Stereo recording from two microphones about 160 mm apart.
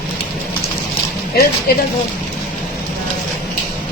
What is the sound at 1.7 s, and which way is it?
Speech, 75° left (ahead or behind).